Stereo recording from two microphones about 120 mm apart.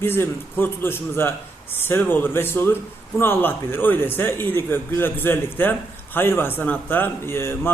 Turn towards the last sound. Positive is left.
turn(degrees=20)  # may be behind; listen again after turning